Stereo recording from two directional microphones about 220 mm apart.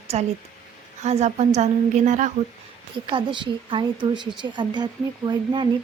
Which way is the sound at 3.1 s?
20° right (ahead or behind).